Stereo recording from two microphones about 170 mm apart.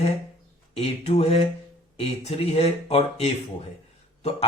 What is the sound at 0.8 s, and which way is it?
Speech, 35° left (ahead or behind).